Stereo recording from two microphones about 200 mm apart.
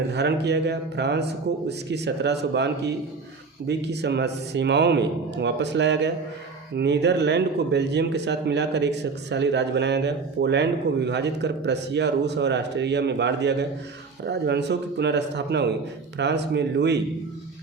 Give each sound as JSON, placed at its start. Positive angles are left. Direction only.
{"t": 0.1, "sound": "speech", "side_deg": -55}